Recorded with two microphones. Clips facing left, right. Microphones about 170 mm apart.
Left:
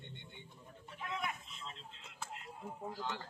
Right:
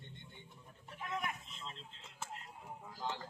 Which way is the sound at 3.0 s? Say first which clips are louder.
Right 3 dB; 30° right (ahead or behind).